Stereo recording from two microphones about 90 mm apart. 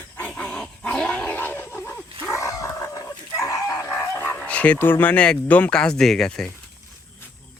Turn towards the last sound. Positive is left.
turn(degrees=5)  # may be behind; listen again after turning